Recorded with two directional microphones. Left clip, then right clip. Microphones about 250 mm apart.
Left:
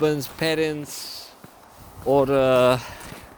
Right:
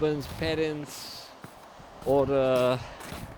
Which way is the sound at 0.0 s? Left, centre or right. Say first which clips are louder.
Left 6 dB; left.